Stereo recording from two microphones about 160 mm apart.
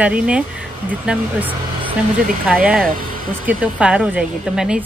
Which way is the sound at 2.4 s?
5° right (ahead or behind).